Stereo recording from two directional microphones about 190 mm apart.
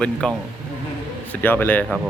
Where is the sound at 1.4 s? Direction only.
10° left (ahead or behind).